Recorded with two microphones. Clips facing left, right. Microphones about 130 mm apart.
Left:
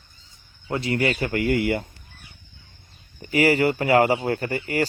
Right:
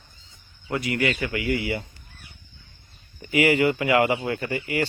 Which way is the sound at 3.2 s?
40° left (ahead or behind).